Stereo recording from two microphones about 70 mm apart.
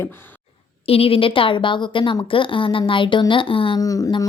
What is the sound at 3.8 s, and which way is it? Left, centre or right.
Music, left.